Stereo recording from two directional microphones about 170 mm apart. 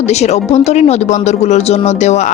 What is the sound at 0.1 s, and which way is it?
A woman's voice, 40° left (ahead or behind).